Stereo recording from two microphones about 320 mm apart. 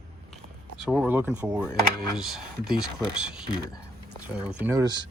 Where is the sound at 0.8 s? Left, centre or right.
Centre.